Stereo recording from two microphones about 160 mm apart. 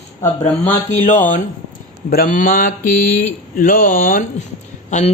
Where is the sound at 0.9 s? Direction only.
55° left (ahead or behind).